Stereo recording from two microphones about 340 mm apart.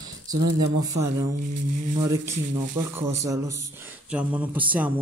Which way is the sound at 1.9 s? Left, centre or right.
Centre.